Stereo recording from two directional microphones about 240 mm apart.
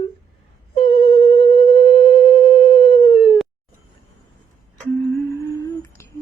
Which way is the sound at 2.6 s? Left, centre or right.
Centre.